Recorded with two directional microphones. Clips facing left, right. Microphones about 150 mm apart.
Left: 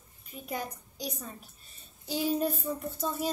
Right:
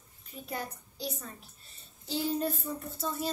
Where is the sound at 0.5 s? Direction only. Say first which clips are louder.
Left 2 dB; 15° left (ahead or behind).